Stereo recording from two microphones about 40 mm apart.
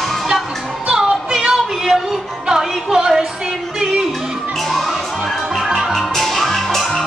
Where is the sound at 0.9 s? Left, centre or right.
Centre.